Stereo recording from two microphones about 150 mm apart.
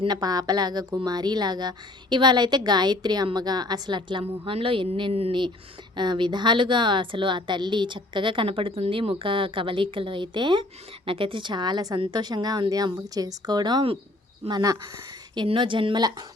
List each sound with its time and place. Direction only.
0.0 s a woman's voice: 25° right (ahead or behind)